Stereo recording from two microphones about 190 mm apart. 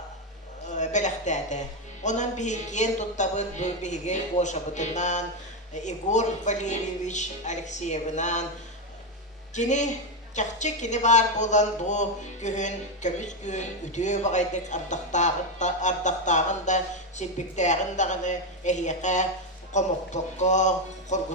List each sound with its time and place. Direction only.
0.7 s a woman's voice: 40° left (ahead or behind)
9.6 s a woman's voice: 40° left (ahead or behind)